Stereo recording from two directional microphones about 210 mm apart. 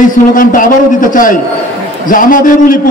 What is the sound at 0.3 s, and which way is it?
A man's voice, 40° left (ahead or behind).